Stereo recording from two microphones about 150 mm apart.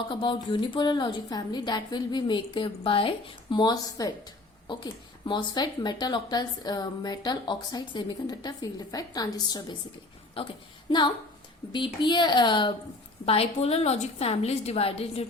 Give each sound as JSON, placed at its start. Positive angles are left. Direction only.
{"t": 0.1, "sound": "a woman's voice", "side_deg": 30}